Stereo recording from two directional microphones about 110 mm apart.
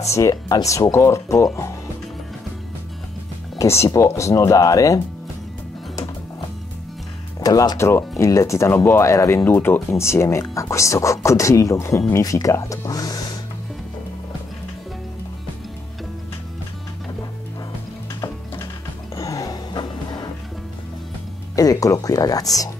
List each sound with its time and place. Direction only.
0.0 s speech: 30° left (ahead or behind)
3.5 s speech: 25° left (ahead or behind)
7.3 s speech: 35° left (ahead or behind)
19.1 s music: 30° left (ahead or behind)
21.5 s speech: 30° left (ahead or behind)